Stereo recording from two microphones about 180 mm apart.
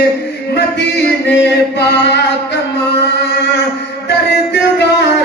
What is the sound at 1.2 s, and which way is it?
Chant, 70° left (ahead or behind).